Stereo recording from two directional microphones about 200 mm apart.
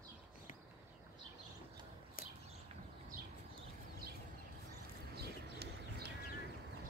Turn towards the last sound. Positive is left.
turn(degrees=-55)  # may be behind; listen again after turning